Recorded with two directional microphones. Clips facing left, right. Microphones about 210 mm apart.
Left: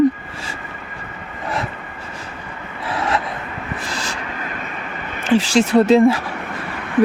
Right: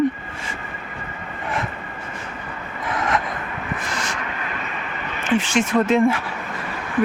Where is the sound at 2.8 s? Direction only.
35° left (ahead or behind).